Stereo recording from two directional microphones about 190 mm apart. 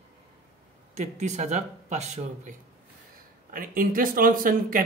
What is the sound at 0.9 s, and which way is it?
Speech, 40° right (ahead or behind).